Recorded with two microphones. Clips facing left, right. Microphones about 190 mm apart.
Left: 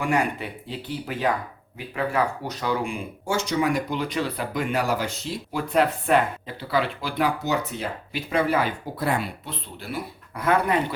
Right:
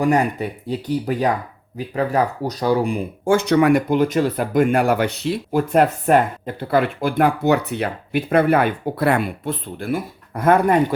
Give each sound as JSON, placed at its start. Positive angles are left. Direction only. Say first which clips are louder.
{"t": 0.0, "sound": "speech", "louder": "right 6 dB", "side_deg": -40}
{"t": 3.2, "sound": "speech", "louder": "right 9 dB", "side_deg": -60}
{"t": 5.5, "sound": "speech", "louder": "right 5 dB", "side_deg": -45}